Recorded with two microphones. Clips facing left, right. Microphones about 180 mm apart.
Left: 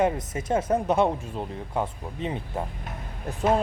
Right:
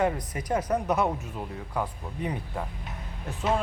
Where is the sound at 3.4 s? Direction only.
35° left (ahead or behind).